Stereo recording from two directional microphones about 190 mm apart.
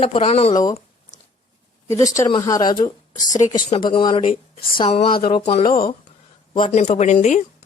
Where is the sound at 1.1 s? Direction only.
40° left (ahead or behind).